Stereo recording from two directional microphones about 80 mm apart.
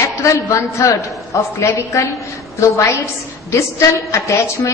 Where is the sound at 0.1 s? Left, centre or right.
Left.